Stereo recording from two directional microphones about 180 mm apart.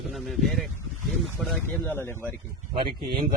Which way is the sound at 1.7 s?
10° left (ahead or behind).